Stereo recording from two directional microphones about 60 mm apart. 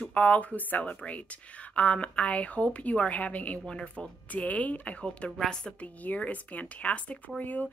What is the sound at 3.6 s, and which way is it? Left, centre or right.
Speech, centre.